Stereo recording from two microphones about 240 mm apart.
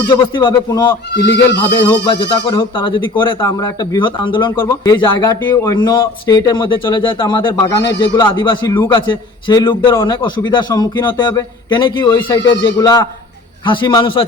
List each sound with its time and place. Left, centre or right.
0.1 s a man's voice: centre
1.1 s speech: left
2.0 s a man's voice: centre